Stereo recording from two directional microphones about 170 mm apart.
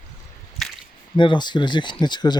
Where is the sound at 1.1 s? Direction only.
30° left (ahead or behind).